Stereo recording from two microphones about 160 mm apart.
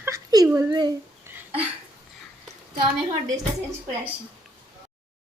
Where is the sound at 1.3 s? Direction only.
15° right (ahead or behind).